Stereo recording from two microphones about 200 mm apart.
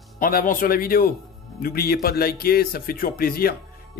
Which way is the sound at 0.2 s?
45° left (ahead or behind).